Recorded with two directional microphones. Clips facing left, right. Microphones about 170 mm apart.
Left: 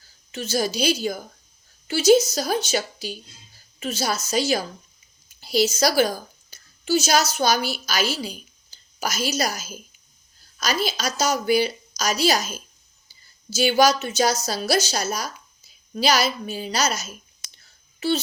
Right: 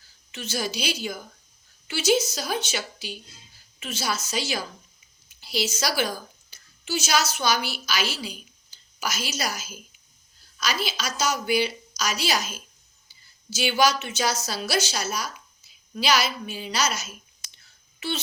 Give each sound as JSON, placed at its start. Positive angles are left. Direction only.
{"t": 0.3, "sound": "a woman's voice", "side_deg": 40}
{"t": 17.6, "sound": "whispering", "side_deg": 35}